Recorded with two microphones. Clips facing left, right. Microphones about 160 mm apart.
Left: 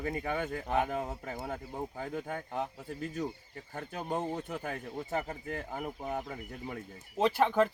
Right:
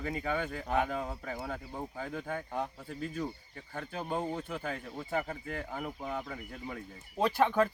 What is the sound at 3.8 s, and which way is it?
Speech, 20° left (ahead or behind).